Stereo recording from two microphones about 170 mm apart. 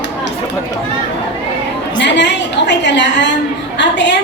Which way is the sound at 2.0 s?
90° left.